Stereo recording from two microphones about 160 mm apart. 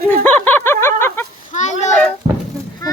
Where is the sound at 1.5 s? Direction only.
50° left (ahead or behind).